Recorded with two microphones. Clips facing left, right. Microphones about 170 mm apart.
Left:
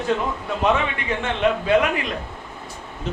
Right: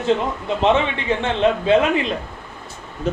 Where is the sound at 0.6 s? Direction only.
25° right (ahead or behind).